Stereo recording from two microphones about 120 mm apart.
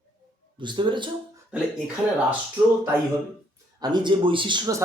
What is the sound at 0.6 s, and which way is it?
Speech, 40° right (ahead or behind).